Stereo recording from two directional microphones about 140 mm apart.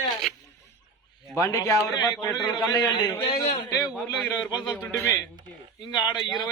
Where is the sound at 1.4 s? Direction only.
25° left (ahead or behind).